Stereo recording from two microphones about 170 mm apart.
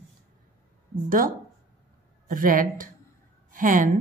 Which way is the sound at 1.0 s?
55° right (ahead or behind).